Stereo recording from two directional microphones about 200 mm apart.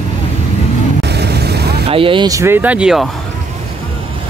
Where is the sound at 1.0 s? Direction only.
55° right (ahead or behind).